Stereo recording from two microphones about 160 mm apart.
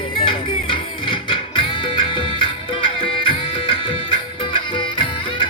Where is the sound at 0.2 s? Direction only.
35° left (ahead or behind).